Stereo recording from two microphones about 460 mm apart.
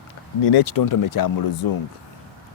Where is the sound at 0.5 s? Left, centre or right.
Left.